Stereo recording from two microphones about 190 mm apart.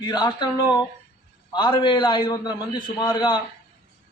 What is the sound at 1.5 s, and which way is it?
A man's voice, 25° left (ahead or behind).